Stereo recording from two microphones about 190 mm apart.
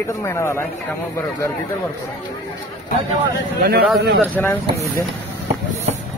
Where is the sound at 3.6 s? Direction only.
55° right (ahead or behind).